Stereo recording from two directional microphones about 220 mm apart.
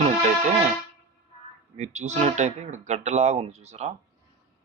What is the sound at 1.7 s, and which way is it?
Speech, 30° right (ahead or behind).